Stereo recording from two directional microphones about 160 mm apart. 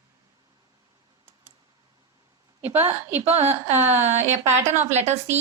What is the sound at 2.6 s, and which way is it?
Speech, 10° right (ahead or behind).